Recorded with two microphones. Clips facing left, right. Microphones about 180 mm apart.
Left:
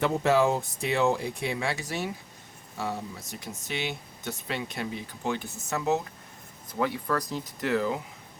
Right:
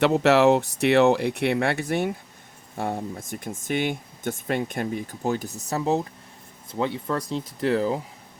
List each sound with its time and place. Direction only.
0.0 s speech: 75° right (ahead or behind); by 8.0 s 35° right (ahead or behind)